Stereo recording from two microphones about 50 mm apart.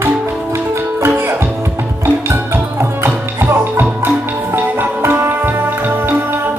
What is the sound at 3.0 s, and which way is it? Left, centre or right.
Music, right.